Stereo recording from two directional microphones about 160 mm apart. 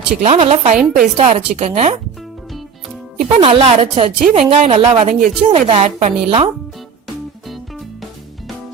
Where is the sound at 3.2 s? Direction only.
35° right (ahead or behind).